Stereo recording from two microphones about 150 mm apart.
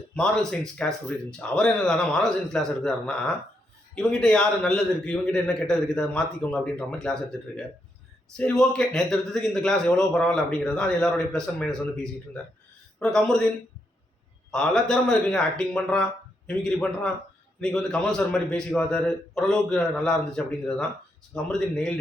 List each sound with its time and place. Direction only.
0.1 s a man's voice: 5° left (ahead or behind)
14.5 s a man's voice: 5° left (ahead or behind)